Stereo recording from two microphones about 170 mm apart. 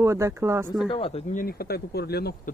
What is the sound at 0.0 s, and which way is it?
Speech, 15° right (ahead or behind).